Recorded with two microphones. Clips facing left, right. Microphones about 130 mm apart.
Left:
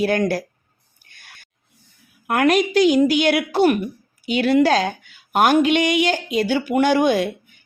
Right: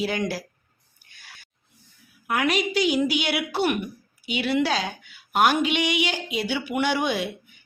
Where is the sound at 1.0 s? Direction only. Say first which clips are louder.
Left 1 dB; 55° left (ahead or behind).